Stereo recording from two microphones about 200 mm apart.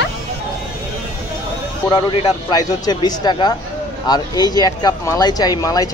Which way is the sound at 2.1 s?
25° left (ahead or behind).